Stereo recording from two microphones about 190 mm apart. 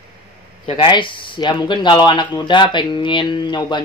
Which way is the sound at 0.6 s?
25° left (ahead or behind).